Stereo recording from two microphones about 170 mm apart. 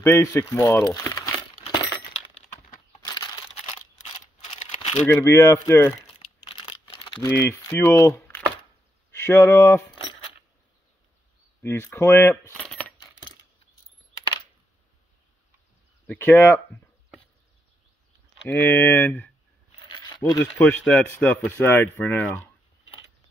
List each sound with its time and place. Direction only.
0.0 s speech: 15° left (ahead or behind)
5.0 s speech: 15° left (ahead or behind)
6.7 s crumpling: 30° left (ahead or behind)
7.2 s speech: 15° left (ahead or behind)
11.6 s speech: 15° left (ahead or behind)
12.6 s coin: 10° left (ahead or behind)
16.1 s speech: 10° left (ahead or behind)
18.5 s speech: 10° left (ahead or behind)
20.0 s a sound: 20° left (ahead or behind)
20.4 s speech: 10° left (ahead or behind)